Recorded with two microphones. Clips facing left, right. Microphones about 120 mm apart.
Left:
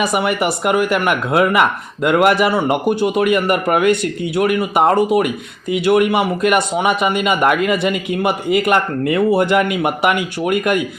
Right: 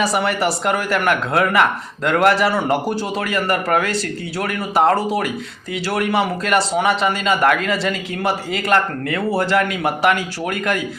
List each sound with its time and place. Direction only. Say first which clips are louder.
0.0 s speech: left 1 dB; 15° left (ahead or behind)